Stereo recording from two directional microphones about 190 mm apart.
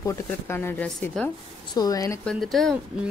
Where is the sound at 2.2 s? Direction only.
Centre (ahead or behind).